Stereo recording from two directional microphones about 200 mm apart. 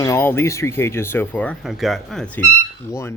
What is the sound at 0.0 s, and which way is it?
Speech, 15° left (ahead or behind).